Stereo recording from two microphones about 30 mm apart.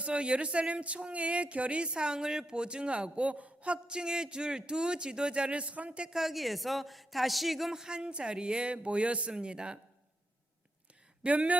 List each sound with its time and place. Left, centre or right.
0.0 s speech: right
6.1 s a man's voice: centre
7.7 s speech: right
11.3 s speech: right